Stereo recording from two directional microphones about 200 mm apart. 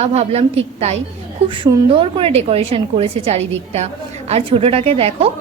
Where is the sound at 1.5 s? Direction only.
25° right (ahead or behind).